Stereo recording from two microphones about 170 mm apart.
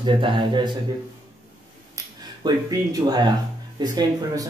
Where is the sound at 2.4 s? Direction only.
25° right (ahead or behind).